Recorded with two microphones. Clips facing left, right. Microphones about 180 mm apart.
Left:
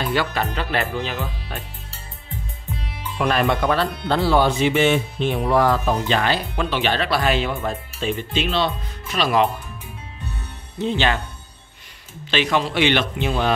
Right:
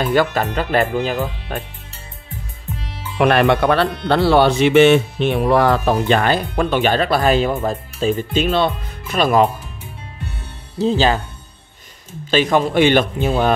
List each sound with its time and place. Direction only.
0.0 s speech: 45° right (ahead or behind)
3.2 s speech: 65° right (ahead or behind); by 9.5 s 50° right (ahead or behind)
10.8 s speech: 35° right (ahead or behind)
12.3 s speech: 45° right (ahead or behind)